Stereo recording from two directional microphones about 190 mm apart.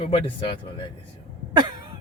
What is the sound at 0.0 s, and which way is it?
Speech, 25° left (ahead or behind).